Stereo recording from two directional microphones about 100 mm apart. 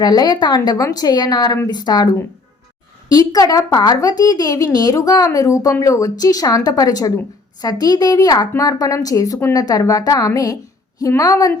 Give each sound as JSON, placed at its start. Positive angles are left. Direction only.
{"t": 0.0, "sound": "a woman's voice", "side_deg": 40}
{"t": 3.1, "sound": "speech", "side_deg": 40}